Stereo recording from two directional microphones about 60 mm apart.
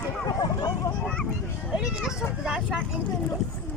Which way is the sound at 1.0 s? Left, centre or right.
Centre.